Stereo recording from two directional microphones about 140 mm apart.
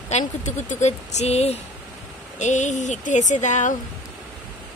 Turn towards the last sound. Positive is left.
turn(degrees=60)  # may be behind; listen again after turning